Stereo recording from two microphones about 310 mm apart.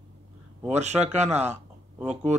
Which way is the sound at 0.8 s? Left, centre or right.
Right.